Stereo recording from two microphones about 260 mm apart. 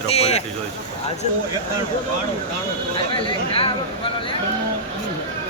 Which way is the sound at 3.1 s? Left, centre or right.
Centre.